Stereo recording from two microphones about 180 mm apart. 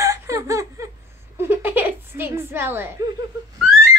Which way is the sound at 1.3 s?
10° right (ahead or behind).